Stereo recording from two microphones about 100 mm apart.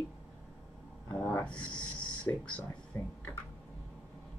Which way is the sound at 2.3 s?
30° left (ahead or behind).